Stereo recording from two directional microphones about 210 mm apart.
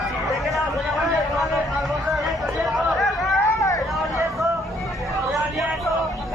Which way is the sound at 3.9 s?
Centre (ahead or behind).